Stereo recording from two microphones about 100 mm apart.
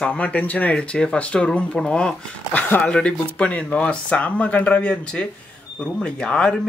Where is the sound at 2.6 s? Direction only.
20° left (ahead or behind).